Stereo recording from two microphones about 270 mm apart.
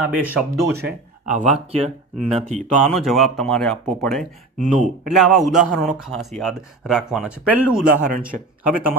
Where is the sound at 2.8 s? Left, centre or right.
Centre.